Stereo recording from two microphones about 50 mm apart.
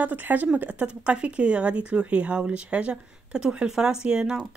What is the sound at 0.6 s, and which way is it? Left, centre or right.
Speech, right.